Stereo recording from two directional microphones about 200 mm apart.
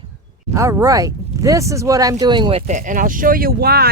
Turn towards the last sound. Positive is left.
turn(degrees=-50)  # may be behind; listen again after turning